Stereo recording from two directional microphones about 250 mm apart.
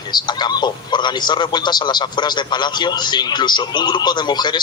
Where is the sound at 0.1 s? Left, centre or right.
Centre.